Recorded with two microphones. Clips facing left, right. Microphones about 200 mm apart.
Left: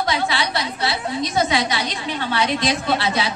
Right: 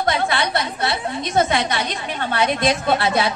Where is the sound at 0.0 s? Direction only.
50° right (ahead or behind).